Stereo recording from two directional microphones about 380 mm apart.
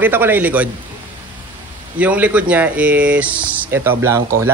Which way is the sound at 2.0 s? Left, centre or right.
Centre.